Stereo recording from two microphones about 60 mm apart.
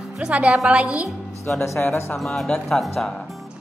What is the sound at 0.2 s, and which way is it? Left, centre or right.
Speech, right.